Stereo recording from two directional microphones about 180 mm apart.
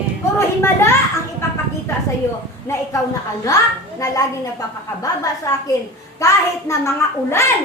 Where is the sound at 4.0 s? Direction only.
20° left (ahead or behind).